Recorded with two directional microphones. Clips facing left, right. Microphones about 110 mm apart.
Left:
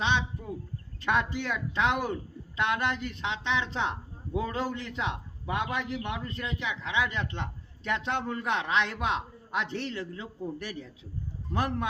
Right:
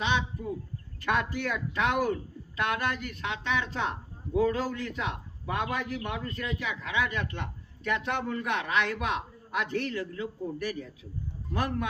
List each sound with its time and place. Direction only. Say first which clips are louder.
1.0 s a man's voice: left 1 dB; 20° left (ahead or behind)